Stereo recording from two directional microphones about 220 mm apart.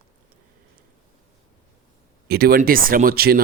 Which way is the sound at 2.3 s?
45° right (ahead or behind).